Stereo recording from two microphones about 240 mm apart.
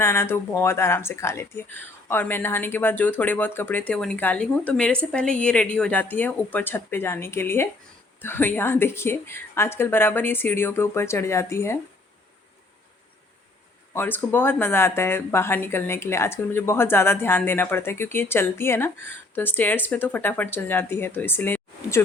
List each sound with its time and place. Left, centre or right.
0.0 s speech: centre
13.9 s speech: centre